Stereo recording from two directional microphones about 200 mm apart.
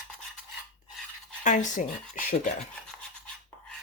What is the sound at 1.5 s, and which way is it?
Speech, 40° left (ahead or behind).